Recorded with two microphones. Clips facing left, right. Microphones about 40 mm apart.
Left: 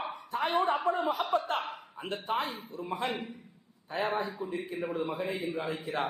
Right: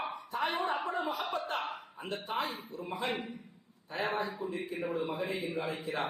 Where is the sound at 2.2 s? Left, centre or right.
Left.